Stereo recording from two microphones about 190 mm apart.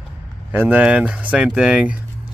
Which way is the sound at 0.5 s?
10° right (ahead or behind).